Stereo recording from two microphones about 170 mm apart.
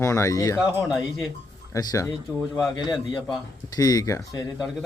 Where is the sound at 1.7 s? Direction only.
20° left (ahead or behind).